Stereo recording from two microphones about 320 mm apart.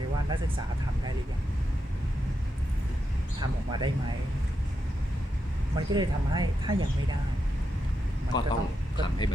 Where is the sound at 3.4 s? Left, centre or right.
Centre.